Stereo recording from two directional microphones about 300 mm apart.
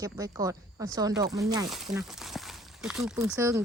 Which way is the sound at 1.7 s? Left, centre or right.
Centre.